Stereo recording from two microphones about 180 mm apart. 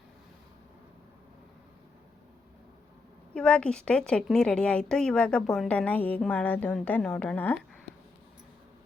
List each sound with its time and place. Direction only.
3.3 s a woman's voice: 5° left (ahead or behind)